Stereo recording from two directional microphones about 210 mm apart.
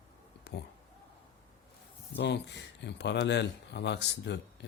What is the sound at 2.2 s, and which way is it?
Speech, 55° left (ahead or behind).